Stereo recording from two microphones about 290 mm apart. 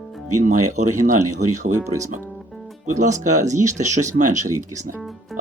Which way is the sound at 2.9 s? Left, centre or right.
Right.